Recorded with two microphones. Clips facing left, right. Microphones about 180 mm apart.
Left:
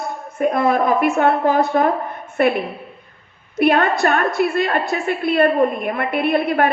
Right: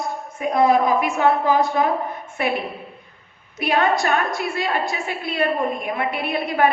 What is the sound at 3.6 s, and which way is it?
A woman's voice, 55° left (ahead or behind).